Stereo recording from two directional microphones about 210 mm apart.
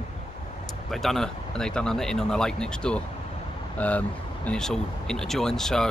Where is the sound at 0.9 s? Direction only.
Centre (ahead or behind).